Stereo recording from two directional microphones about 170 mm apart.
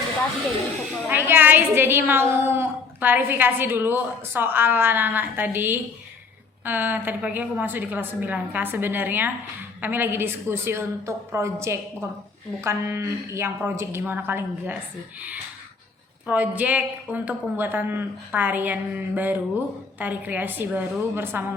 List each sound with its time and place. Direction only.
1.1 s a woman's voice: 10° right (ahead or behind)
16.2 s a woman's voice: 10° right (ahead or behind)